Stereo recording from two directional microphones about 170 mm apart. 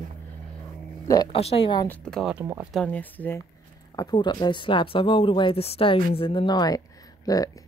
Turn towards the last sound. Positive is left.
turn(degrees=20)  # may be behind; listen again after turning